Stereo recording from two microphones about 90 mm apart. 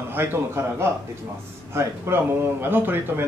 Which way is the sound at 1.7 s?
30° right (ahead or behind).